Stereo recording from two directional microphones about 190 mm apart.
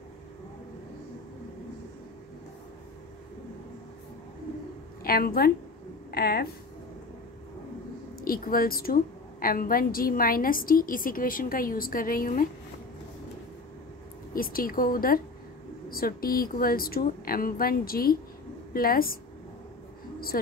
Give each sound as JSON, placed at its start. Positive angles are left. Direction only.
{"t": 5.0, "sound": "a woman's voice", "side_deg": 50}
{"t": 8.2, "sound": "a woman's voice", "side_deg": 50}
{"t": 14.3, "sound": "a woman's voice", "side_deg": 50}